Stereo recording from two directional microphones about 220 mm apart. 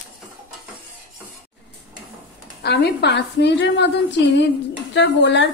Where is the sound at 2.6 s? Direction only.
50° left (ahead or behind).